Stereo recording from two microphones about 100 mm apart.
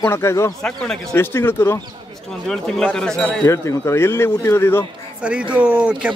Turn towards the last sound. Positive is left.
turn(degrees=-10)  # may be behind; listen again after turning